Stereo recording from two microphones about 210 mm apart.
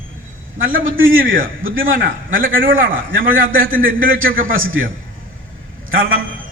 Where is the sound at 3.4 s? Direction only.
40° right (ahead or behind).